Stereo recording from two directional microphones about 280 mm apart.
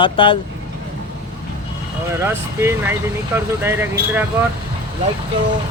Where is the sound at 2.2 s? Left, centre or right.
Centre.